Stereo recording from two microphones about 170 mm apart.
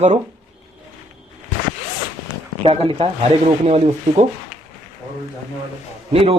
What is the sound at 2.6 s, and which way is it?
A man's voice, 35° right (ahead or behind).